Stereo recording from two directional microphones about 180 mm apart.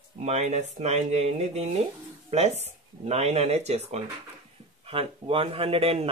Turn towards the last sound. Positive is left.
turn(degrees=-30)  # may be behind; listen again after turning